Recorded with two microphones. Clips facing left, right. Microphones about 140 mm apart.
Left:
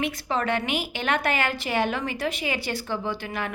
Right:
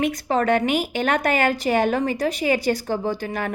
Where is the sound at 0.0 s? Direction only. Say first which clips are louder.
Right 6 dB; 45° right (ahead or behind).